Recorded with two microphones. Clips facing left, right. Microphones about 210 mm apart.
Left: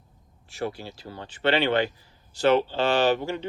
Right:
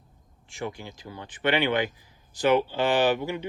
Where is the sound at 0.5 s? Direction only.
15° right (ahead or behind).